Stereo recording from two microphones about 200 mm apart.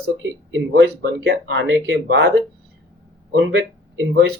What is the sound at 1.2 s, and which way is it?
Speech, 65° right (ahead or behind).